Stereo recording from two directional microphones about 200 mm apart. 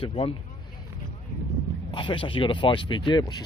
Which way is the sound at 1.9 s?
25° left (ahead or behind).